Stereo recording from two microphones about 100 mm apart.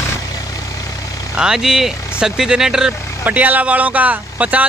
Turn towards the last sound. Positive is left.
turn(degrees=-15)  # may be behind; listen again after turning